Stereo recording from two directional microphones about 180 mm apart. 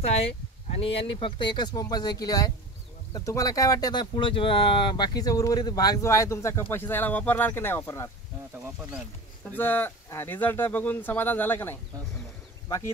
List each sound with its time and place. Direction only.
0.0 s speech: 35° left (ahead or behind); by 8.1 s 15° left (ahead or behind)
9.5 s speech: 10° left (ahead or behind)